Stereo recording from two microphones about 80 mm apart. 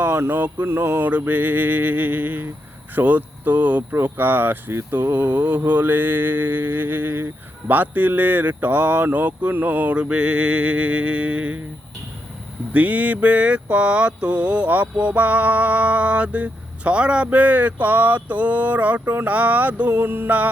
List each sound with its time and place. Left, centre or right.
0.0 s speech: right
12.7 s mantra: centre
19.9 s speech: right